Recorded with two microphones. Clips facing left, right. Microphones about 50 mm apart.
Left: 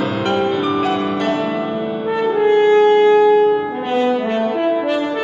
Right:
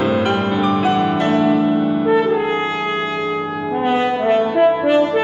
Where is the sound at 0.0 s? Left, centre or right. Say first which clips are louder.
Right 1 dB; centre.